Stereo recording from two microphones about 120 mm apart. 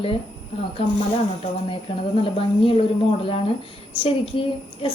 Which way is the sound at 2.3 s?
50° left (ahead or behind).